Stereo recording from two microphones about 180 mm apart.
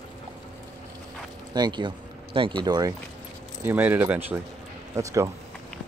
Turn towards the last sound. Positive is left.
turn(degrees=-15)  # may be behind; listen again after turning